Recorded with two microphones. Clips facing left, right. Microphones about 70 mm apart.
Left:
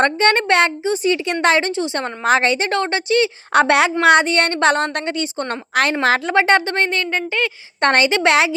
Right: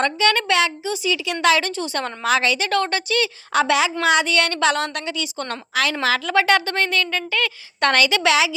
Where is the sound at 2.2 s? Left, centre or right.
Left.